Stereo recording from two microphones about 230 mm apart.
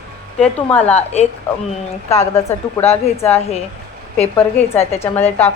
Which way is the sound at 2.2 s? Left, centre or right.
Centre.